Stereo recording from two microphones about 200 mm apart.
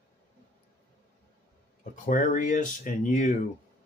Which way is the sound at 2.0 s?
40° left (ahead or behind).